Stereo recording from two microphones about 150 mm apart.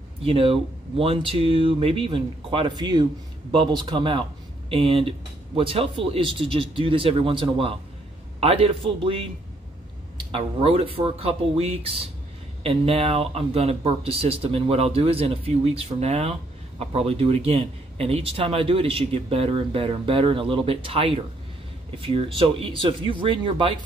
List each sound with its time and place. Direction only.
0.2 s speech: 40° right (ahead or behind)
10.3 s speech: 40° right (ahead or behind)